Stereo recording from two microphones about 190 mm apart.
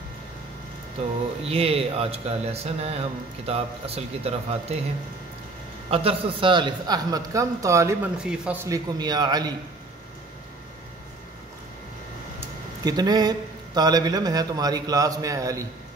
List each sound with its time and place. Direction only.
1.4 s speech: 30° right (ahead or behind)
5.9 s a man's voice: 30° right (ahead or behind)
8.2 s speech: 5° right (ahead or behind)
8.6 s a man's voice: 20° right (ahead or behind)
12.4 s speech: 20° right (ahead or behind)